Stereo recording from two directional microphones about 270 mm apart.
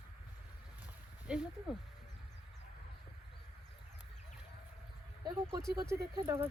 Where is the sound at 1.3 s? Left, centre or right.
Centre.